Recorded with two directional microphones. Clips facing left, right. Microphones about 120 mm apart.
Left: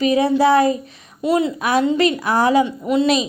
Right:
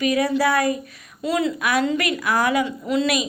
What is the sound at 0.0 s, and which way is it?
A woman's voice, 25° left (ahead or behind).